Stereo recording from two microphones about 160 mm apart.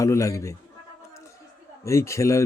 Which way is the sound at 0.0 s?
20° left (ahead or behind).